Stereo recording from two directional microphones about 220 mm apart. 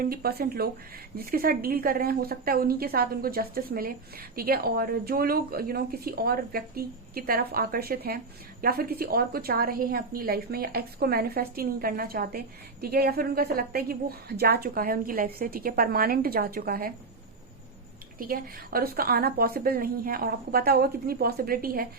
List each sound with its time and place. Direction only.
0.0 s a woman's voice: 45° right (ahead or behind)
18.2 s a woman's voice: 40° right (ahead or behind)